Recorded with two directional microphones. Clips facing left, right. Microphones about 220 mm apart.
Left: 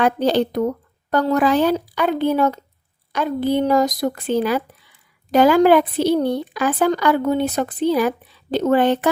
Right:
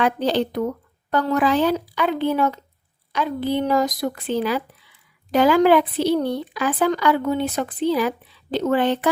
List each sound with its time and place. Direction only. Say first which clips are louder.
0.0 s speech: left 3 dB; 45° left (ahead or behind)